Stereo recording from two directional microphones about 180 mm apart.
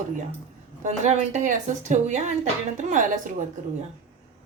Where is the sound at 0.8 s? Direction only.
40° right (ahead or behind).